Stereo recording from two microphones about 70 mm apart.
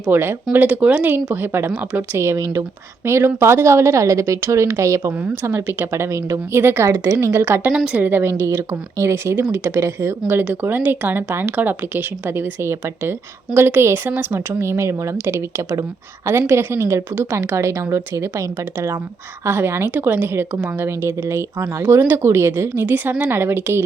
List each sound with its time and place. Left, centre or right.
0.1 s speech: right
0.5 s speech: right
2.1 s a woman's voice: right
5.3 s speech: right
6.6 s speech: right
6.8 s speech: right
10.4 s speech: right
19.5 s speech: right